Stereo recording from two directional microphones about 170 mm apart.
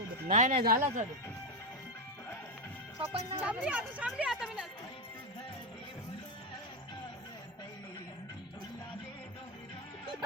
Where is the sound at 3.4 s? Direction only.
10° right (ahead or behind).